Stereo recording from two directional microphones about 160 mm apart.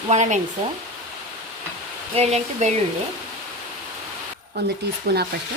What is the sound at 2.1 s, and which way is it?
Speech, 45° right (ahead or behind).